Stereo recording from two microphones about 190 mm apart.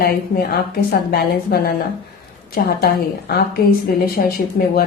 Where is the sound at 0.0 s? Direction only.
55° left (ahead or behind).